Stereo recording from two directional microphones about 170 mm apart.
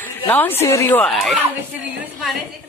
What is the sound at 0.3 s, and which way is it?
Speech, 10° left (ahead or behind).